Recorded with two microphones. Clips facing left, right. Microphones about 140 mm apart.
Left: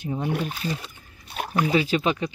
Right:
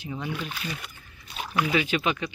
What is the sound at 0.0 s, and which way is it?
Speech, 50° left (ahead or behind).